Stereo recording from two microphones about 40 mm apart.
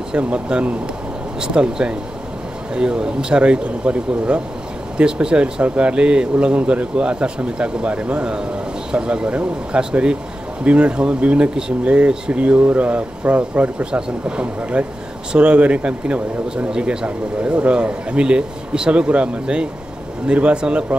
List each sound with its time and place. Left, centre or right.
0.2 s speech: right
16.7 s speech: right